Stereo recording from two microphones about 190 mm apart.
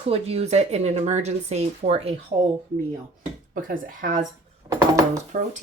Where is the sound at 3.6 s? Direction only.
50° right (ahead or behind).